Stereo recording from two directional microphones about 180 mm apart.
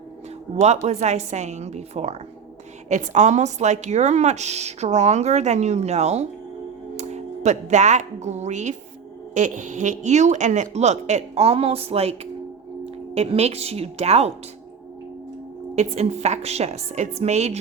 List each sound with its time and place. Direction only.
0.5 s a woman's voice: 35° right (ahead or behind)
15.7 s a woman's voice: 35° right (ahead or behind)